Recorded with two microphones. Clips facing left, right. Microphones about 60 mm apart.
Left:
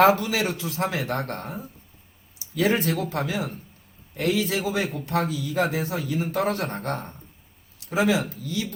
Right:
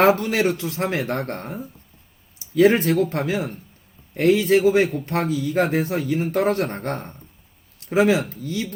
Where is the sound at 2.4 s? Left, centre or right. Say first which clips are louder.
Right 7 dB; right.